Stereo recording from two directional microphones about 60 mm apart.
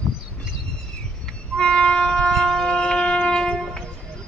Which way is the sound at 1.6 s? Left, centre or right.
Centre.